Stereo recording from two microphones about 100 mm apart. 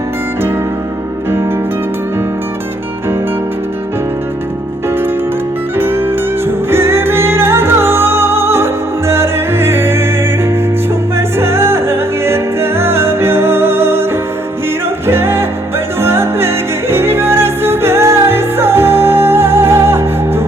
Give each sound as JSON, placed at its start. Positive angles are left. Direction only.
{"t": 5.7, "sound": "music", "side_deg": -25}
{"t": 11.3, "sound": "music", "side_deg": -25}
{"t": 15.0, "sound": "music", "side_deg": -25}